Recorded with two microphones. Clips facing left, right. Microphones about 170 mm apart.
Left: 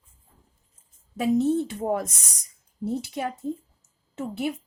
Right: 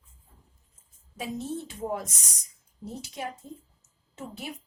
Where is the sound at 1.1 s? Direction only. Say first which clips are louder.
Left 12 dB; 65° left (ahead or behind).